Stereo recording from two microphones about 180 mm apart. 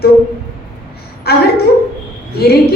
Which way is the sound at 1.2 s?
60° left (ahead or behind).